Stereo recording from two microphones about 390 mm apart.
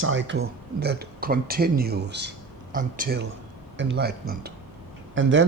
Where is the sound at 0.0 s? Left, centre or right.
Right.